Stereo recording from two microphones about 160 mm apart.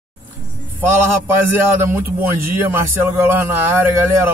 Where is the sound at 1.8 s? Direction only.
15° right (ahead or behind).